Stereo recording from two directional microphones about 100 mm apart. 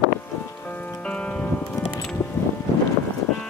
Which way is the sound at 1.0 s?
10° left (ahead or behind).